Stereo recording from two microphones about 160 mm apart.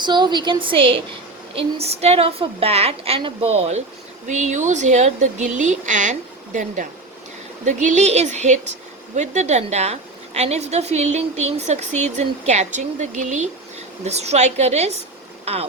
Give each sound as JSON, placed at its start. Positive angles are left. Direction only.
{"t": 0.0, "sound": "a woman's voice", "side_deg": -30}